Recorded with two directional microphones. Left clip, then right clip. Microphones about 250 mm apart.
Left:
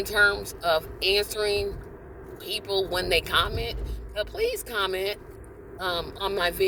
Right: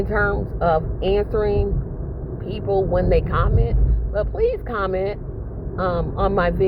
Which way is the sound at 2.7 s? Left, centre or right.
Left.